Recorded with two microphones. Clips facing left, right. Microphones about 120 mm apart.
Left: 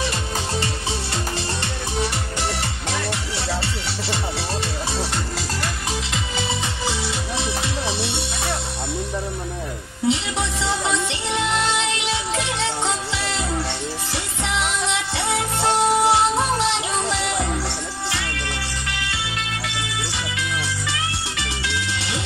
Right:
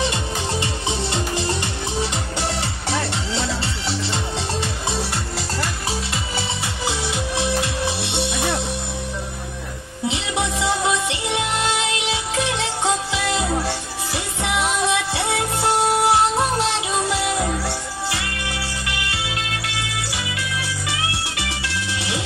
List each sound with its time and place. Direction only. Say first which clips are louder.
0.1 s music: right 1 dB; 20° right (ahead or behind)
6.9 s music: right 4 dB; 15° right (ahead or behind)
10.0 s music: left 1 dB; 15° right (ahead or behind)
21.9 s music: right 2 dB; 10° right (ahead or behind)